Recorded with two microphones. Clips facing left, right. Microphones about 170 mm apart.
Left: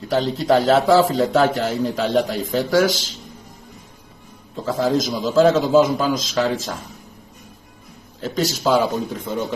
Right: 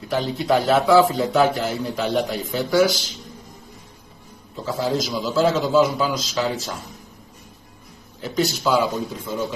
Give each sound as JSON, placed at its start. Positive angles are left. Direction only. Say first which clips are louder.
{"t": 0.4, "sound": "a man's voice", "louder": "left 2 dB", "side_deg": 45}
{"t": 4.6, "sound": "a man's voice", "louder": "left 4 dB", "side_deg": 45}
{"t": 8.4, "sound": "a man's voice", "louder": "left 2 dB", "side_deg": 50}